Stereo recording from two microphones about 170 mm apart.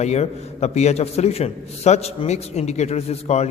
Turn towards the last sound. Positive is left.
turn(degrees=40)  # may be behind; listen again after turning